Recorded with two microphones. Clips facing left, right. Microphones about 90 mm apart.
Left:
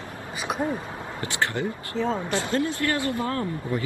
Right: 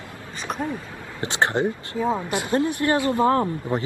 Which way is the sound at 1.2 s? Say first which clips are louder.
Right 6 dB; 20° right (ahead or behind).